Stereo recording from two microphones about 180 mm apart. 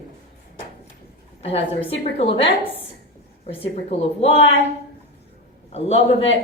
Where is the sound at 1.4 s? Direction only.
35° left (ahead or behind).